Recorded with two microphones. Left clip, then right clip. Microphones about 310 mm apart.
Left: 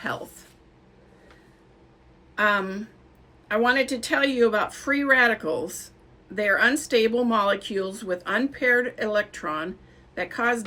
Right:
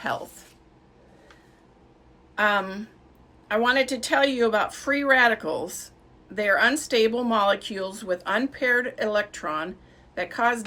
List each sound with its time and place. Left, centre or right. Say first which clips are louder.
0.0 s speech: right 2 dB; centre
2.3 s speech: even; centre